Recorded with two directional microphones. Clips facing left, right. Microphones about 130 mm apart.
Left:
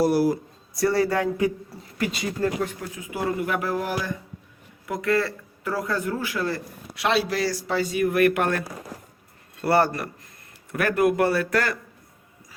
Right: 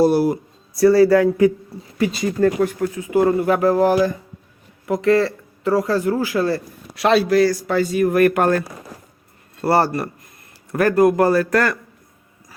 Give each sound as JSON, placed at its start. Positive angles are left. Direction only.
{"t": 0.0, "sound": "speech", "side_deg": -25}
{"t": 2.1, "sound": "speech", "side_deg": -50}
{"t": 3.1, "sound": "speech", "side_deg": -40}